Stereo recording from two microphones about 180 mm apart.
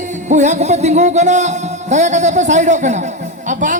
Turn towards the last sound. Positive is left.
turn(degrees=-45)  # may be behind; listen again after turning